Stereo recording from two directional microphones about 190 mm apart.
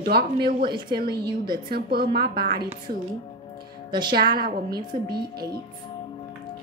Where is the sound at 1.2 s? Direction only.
25° right (ahead or behind).